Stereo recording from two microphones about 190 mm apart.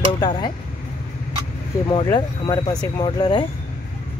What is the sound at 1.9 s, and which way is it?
Speech, 25° left (ahead or behind).